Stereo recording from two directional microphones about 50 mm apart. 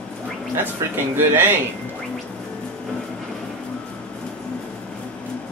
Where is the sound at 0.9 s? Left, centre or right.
Right.